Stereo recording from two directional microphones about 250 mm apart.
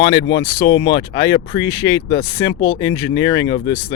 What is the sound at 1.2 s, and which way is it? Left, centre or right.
Speech, centre.